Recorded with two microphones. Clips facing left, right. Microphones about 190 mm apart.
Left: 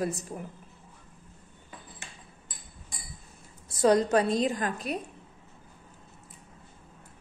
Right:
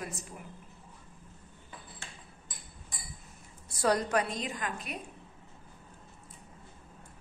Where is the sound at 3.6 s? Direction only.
20° left (ahead or behind).